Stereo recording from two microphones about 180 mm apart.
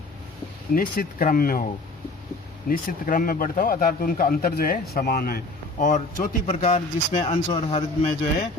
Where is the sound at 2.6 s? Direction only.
50° left (ahead or behind); by 8.1 s 30° left (ahead or behind).